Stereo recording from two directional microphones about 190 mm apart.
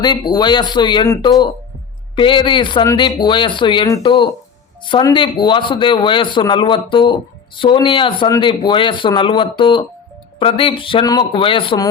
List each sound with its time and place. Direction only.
0.0 s speech: 20° left (ahead or behind)